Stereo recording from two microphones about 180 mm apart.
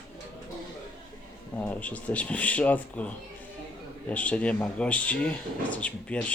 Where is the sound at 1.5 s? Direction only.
10° left (ahead or behind).